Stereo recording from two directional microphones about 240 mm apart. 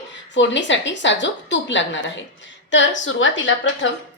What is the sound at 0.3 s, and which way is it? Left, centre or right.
A woman's voice, left.